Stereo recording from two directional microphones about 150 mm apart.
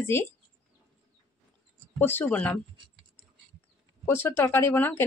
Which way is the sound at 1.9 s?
15° left (ahead or behind).